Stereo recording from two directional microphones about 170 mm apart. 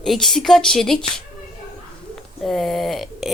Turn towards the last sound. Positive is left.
turn(degrees=0)  # may be behind; listen again after turning